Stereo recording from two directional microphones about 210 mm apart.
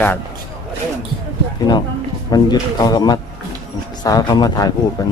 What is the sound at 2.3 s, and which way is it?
Speech, 20° left (ahead or behind).